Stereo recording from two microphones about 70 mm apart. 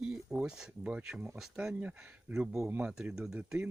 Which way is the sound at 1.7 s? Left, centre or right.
Right.